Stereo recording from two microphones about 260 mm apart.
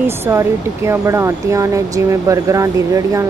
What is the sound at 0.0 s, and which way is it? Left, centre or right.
Speech, centre.